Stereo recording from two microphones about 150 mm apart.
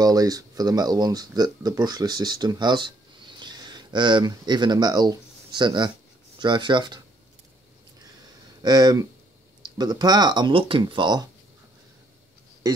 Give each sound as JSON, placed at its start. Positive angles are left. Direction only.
{"t": 0.0, "sound": "speech", "side_deg": -25}
{"t": 8.6, "sound": "speech", "side_deg": -25}
{"t": 12.6, "sound": "a sound", "side_deg": -25}